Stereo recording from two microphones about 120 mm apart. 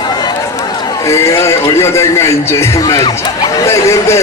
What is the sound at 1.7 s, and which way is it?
A man's voice, 20° left (ahead or behind).